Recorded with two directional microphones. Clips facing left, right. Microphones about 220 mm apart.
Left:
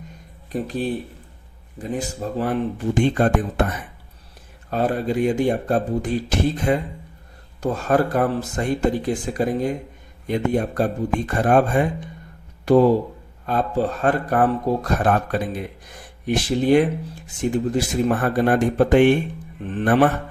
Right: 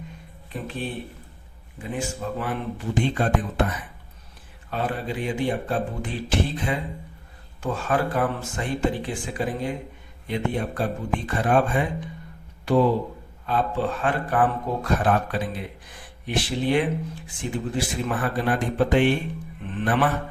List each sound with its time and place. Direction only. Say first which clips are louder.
0.5 s speech: left 7 dB; 40° left (ahead or behind)
4.7 s speech: left 7 dB; 40° left (ahead or behind)